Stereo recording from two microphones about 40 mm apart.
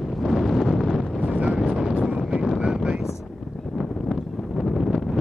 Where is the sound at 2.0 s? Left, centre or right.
Right.